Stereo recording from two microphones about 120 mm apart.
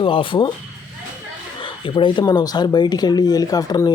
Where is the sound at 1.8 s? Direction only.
40° left (ahead or behind).